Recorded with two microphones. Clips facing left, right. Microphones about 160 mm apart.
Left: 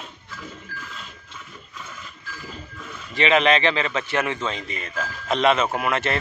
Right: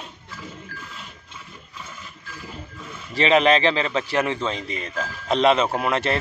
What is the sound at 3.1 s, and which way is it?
A man's voice, 35° right (ahead or behind).